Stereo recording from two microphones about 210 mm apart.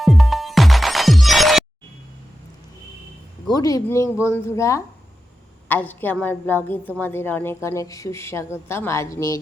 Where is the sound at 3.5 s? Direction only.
15° left (ahead or behind).